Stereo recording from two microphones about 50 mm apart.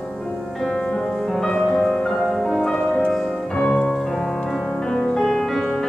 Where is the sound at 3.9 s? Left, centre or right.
Centre.